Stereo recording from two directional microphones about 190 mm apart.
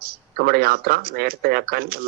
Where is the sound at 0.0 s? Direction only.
50° right (ahead or behind).